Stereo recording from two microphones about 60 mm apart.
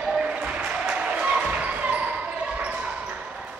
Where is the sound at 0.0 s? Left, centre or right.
Centre.